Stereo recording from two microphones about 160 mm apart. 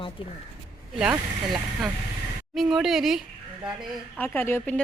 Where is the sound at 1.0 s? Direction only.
5° right (ahead or behind).